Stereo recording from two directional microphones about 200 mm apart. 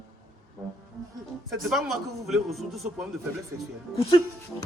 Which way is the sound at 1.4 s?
Centre (ahead or behind).